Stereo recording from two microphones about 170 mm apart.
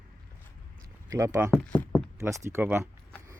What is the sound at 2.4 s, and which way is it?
Keys jangling, 15° right (ahead or behind).